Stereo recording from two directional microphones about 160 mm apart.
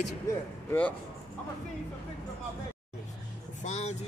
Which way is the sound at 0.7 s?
10° left (ahead or behind).